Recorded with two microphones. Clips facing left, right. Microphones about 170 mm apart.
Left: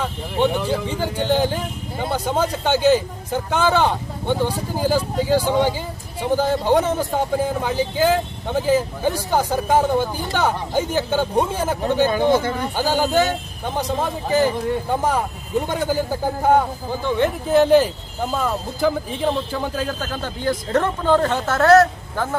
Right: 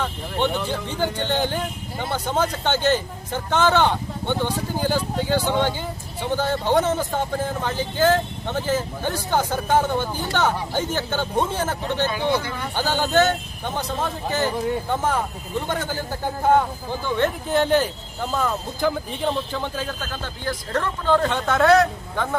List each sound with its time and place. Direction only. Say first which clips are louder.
0.0 s speech: left 3 dB; 5° left (ahead or behind)
12.0 s speech: left 5 dB; 45° left (ahead or behind)
12.7 s speech: left 1 dB; 10° left (ahead or behind)
20.2 s speech: left 7 dB; 15° left (ahead or behind)